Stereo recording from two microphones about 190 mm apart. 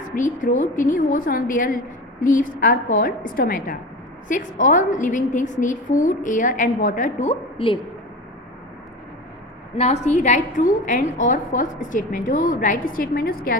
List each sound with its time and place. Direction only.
0.0 s a woman's voice: 45° left (ahead or behind)
9.7 s a woman's voice: 35° left (ahead or behind)